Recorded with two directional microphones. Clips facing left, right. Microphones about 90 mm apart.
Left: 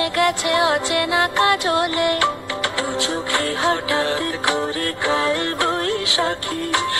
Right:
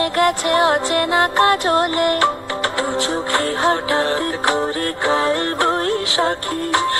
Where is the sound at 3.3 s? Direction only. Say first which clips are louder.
Right 3 dB; 35° right (ahead or behind).